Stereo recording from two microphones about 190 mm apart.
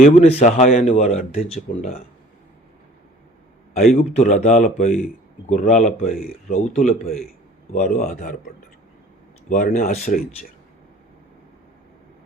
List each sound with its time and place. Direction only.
0.0 s speech: 35° left (ahead or behind)
3.8 s speech: 50° left (ahead or behind)
4.1 s speech: 35° left (ahead or behind)
9.5 s speech: 45° left (ahead or behind)